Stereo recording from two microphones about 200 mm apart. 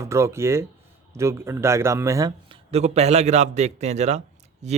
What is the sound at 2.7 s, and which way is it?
A man's voice, 35° right (ahead or behind).